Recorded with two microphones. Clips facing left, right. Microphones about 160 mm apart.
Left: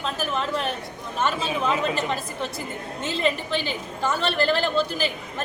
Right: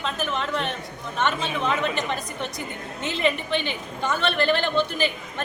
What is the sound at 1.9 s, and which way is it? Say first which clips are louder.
A woman's voice: left 1 dB; 35° left (ahead or behind).